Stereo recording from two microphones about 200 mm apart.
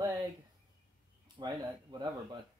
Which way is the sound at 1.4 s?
20° right (ahead or behind).